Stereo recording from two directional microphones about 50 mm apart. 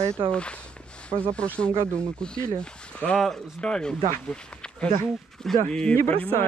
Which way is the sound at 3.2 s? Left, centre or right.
Centre.